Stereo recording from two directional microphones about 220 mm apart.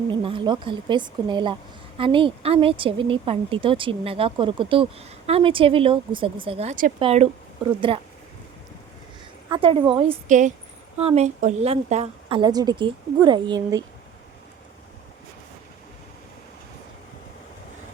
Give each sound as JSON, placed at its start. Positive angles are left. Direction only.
{"t": 0.1, "sound": "speech", "side_deg": -25}
{"t": 9.5, "sound": "speech", "side_deg": -25}